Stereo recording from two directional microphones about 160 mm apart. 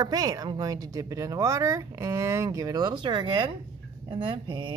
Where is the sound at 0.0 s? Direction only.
25° right (ahead or behind).